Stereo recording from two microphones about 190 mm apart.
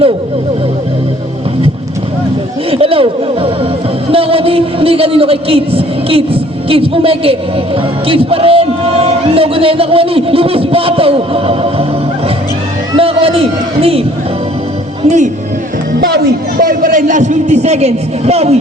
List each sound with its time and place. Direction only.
2.6 s a man's voice: 30° right (ahead or behind)
13.0 s a man's voice: 30° right (ahead or behind)
15.0 s a man's voice: 40° right (ahead or behind)
16.0 s a man's voice: 55° right (ahead or behind); by 18.5 s 35° right (ahead or behind)